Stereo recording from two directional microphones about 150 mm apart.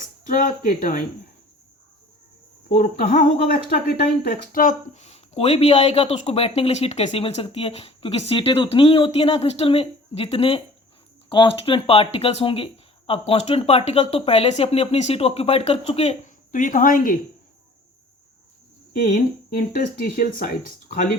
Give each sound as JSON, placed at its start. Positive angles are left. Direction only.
{"t": 0.0, "sound": "speech", "side_deg": 60}
{"t": 2.7, "sound": "speech", "side_deg": 65}
{"t": 18.9, "sound": "speech", "side_deg": 70}